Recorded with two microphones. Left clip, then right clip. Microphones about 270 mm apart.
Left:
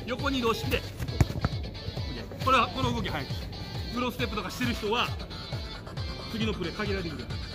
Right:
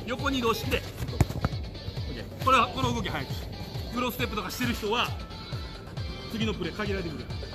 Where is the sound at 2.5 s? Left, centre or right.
Centre.